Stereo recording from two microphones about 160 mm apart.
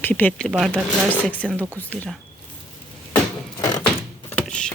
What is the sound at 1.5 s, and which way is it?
Speech, 15° right (ahead or behind).